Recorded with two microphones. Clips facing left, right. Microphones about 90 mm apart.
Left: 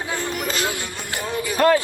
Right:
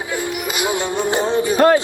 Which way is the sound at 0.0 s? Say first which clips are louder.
Right 2 dB; 10° right (ahead or behind).